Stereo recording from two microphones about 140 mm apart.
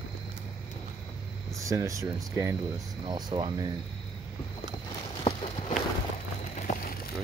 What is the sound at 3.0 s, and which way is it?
Speech, 30° right (ahead or behind).